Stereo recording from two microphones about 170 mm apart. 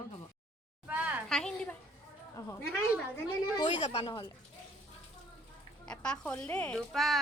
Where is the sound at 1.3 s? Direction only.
5° left (ahead or behind).